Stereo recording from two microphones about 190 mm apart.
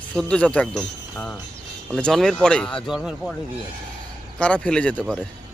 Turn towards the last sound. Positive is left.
turn(degrees=5)  # may be behind; listen again after turning